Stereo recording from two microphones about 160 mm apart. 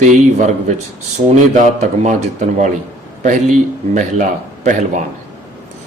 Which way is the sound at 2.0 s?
50° right (ahead or behind).